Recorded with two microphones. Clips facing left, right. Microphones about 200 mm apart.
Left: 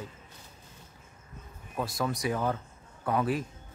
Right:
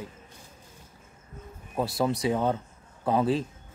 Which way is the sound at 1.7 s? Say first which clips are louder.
Right 5 dB; 30° right (ahead or behind).